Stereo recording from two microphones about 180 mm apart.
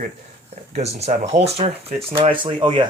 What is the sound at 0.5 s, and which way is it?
Speech, 35° right (ahead or behind).